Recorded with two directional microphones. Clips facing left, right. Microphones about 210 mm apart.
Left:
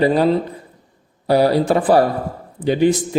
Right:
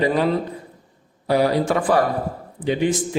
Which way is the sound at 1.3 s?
35° left (ahead or behind).